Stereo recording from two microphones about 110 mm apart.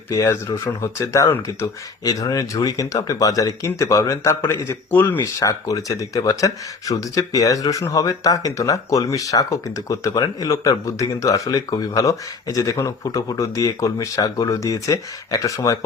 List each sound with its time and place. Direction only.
0.1 s speech: 30° left (ahead or behind)